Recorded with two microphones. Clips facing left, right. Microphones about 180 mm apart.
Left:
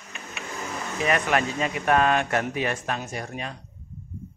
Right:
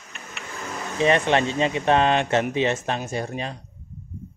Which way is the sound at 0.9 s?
25° right (ahead or behind).